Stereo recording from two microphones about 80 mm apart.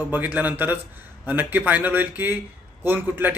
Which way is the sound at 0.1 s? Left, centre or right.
Right.